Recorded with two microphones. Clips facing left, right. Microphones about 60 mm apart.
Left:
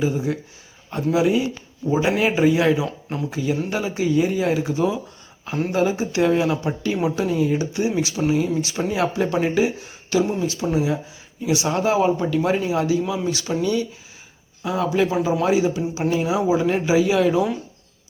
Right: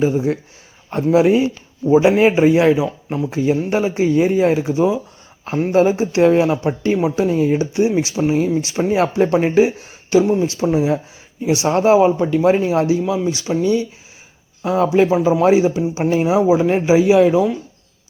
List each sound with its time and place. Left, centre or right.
0.0 s a man's voice: right
1.9 s speech: right
3.3 s a man's voice: right
11.9 s speech: centre
12.4 s a man's voice: right
13.0 s speech: centre
14.6 s a man's voice: right; by 17.4 s centre